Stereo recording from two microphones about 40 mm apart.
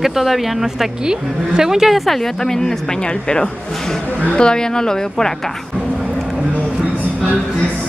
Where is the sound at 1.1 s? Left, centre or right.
Centre.